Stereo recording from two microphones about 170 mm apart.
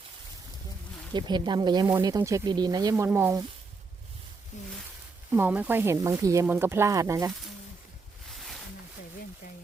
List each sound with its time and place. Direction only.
1.1 s speech: 25° right (ahead or behind)
4.5 s a sound: 45° left (ahead or behind)
5.3 s speech: 10° right (ahead or behind)